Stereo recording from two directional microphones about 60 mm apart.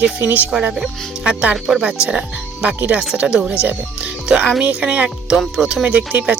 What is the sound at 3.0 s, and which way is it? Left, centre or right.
Speech, centre.